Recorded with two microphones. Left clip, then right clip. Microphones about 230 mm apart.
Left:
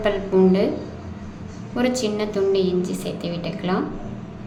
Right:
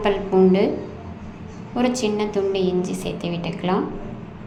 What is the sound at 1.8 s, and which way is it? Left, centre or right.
A woman's voice, centre.